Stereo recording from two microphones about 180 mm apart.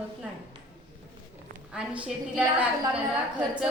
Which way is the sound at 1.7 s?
5° right (ahead or behind).